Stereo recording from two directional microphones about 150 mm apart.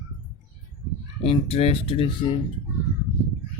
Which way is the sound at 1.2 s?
40° left (ahead or behind).